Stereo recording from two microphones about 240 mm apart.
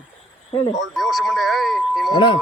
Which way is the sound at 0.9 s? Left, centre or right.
Centre.